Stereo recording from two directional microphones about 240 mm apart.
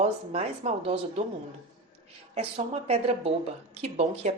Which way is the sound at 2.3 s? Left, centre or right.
Right.